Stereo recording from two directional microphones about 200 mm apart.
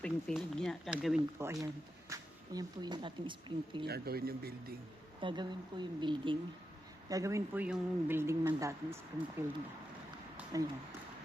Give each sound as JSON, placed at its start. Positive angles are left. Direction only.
{"t": 0.0, "sound": "speech", "side_deg": 5}
{"t": 3.8, "sound": "speech", "side_deg": -50}
{"t": 5.2, "sound": "speech", "side_deg": -20}
{"t": 10.5, "sound": "speech", "side_deg": -15}